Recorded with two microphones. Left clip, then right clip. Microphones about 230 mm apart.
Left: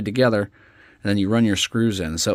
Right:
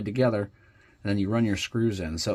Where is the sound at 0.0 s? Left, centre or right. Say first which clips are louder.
Left 6 dB; left.